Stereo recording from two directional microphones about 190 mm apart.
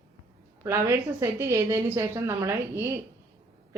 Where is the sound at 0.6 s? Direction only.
15° right (ahead or behind).